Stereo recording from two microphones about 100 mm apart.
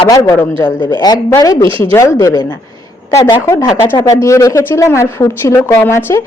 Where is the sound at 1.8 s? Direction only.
30° left (ahead or behind).